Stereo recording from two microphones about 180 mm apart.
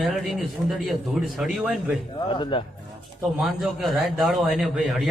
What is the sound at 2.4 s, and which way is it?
Speech, 30° left (ahead or behind).